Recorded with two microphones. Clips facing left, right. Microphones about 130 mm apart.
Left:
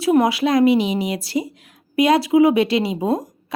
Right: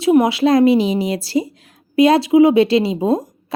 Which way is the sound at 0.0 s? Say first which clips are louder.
Right 3 dB; 25° right (ahead or behind).